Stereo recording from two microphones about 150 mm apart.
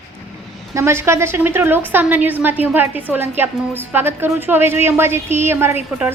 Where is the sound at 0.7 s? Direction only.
20° right (ahead or behind).